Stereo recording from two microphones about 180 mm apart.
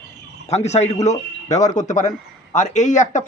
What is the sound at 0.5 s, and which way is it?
A man's voice, 40° left (ahead or behind).